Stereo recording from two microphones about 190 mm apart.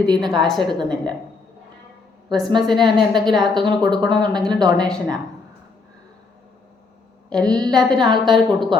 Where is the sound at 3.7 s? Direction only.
25° right (ahead or behind).